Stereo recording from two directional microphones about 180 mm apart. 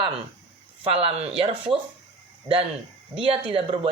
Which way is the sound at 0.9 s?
35° right (ahead or behind).